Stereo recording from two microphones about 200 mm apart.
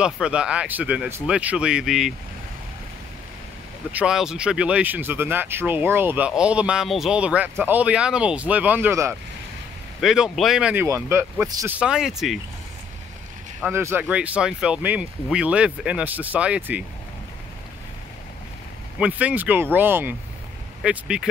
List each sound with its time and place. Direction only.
0.0 s speech: 5° right (ahead or behind)
3.9 s speech: 5° right (ahead or behind)
13.6 s speech: 10° right (ahead or behind)
18.9 s speech: 5° right (ahead or behind)